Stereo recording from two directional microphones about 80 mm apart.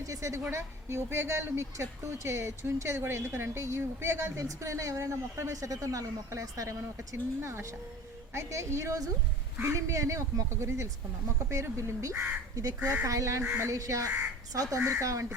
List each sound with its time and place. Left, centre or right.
0.0 s a woman's voice: right